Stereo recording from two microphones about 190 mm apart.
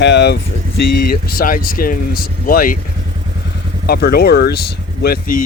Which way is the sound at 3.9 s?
55° left (ahead or behind).